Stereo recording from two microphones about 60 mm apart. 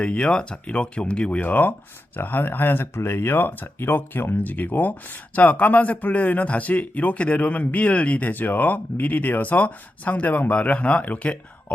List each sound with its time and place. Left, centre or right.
0.0 s speech: centre